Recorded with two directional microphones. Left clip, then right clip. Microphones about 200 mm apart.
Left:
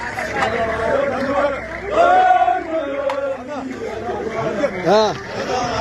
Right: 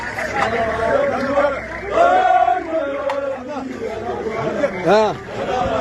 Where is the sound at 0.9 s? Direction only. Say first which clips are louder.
Right 3 dB; 50° left (ahead or behind).